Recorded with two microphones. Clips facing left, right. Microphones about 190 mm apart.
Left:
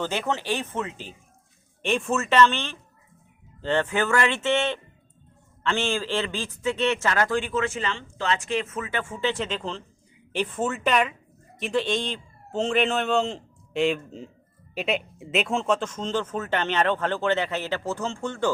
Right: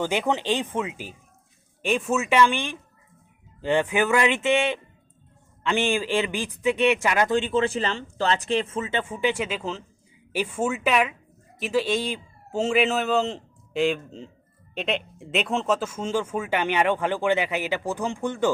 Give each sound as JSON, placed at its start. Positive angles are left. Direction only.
{"t": 0.0, "sound": "a man's voice", "side_deg": -15}